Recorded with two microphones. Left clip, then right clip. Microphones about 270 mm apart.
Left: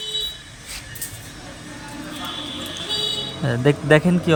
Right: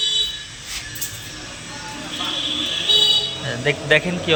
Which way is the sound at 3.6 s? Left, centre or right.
Left.